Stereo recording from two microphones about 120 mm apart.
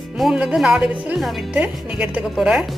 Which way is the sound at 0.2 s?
5° right (ahead or behind).